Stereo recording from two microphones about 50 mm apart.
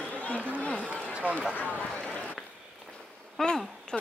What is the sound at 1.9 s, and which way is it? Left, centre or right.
Run, centre.